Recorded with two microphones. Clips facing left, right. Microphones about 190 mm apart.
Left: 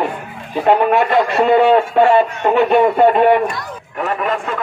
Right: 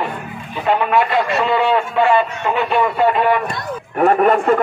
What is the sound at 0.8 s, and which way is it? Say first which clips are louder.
Speech: left 3 dB; 50° left (ahead or behind).